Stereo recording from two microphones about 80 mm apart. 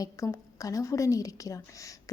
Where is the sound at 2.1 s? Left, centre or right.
Left.